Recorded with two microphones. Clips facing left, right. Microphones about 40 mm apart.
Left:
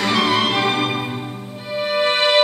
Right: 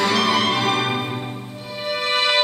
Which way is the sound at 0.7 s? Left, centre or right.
Centre.